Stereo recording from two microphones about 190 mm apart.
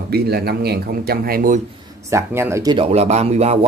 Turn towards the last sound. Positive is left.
turn(degrees=-35)  # may be behind; listen again after turning